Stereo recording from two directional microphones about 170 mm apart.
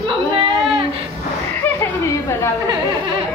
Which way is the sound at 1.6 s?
15° left (ahead or behind).